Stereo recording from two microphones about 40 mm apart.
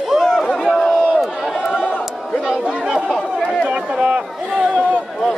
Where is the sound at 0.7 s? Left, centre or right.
Centre.